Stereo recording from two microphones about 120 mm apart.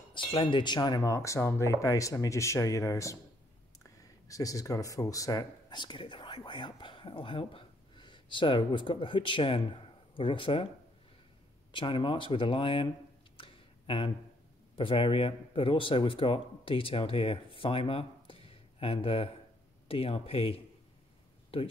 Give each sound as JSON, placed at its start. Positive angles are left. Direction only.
{"t": 0.1, "sound": "speech", "side_deg": 40}
{"t": 4.3, "sound": "speech", "side_deg": 30}
{"t": 11.7, "sound": "speech", "side_deg": 40}
{"t": 13.4, "sound": "a sound", "side_deg": 45}
{"t": 14.8, "sound": "speech", "side_deg": 45}